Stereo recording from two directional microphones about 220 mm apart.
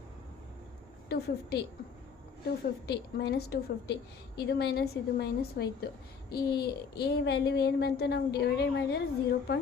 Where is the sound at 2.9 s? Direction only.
45° left (ahead or behind).